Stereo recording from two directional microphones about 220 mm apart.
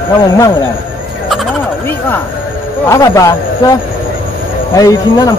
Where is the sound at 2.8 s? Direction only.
15° left (ahead or behind).